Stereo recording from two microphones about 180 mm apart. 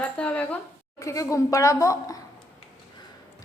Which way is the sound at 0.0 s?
10° left (ahead or behind).